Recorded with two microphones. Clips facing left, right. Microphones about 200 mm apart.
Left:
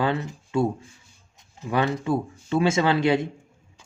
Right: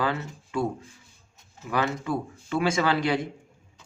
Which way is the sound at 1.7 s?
25° left (ahead or behind).